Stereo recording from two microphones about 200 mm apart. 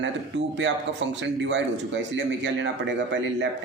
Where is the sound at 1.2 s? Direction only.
65° right (ahead or behind).